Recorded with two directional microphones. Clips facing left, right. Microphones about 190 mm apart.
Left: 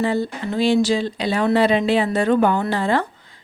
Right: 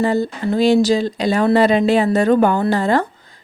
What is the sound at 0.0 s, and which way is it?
Speech, 45° right (ahead or behind).